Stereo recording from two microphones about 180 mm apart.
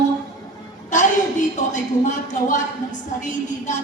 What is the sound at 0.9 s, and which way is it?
A woman's voice, 45° left (ahead or behind).